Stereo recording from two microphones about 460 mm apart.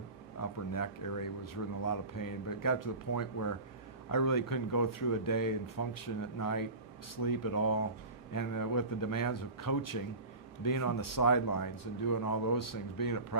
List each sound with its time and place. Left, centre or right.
0.4 s speech: left